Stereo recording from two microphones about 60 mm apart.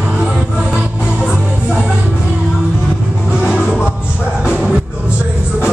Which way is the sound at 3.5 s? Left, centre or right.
Centre.